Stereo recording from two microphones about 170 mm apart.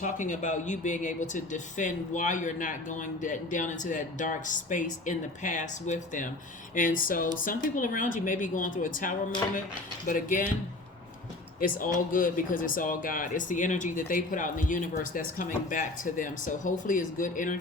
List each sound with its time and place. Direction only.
0.0 s speech: 50° left (ahead or behind)
11.8 s speech: 55° left (ahead or behind)